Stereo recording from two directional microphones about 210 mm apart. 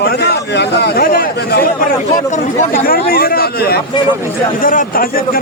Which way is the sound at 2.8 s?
45° left (ahead or behind).